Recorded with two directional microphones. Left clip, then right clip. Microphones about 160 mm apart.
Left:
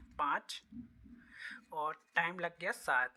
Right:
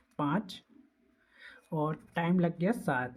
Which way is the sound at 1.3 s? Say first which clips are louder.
Right 4 dB; 25° left (ahead or behind).